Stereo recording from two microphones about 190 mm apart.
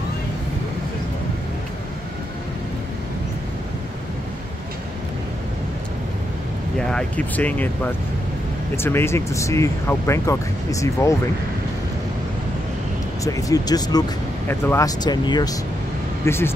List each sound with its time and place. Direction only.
6.8 s speech: 5° left (ahead or behind)
13.2 s speech: 15° left (ahead or behind)